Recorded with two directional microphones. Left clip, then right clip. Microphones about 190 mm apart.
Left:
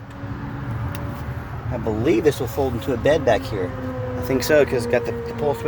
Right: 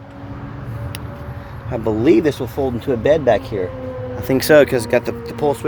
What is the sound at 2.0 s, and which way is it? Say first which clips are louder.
Speech: right 3 dB; 50° right (ahead or behind).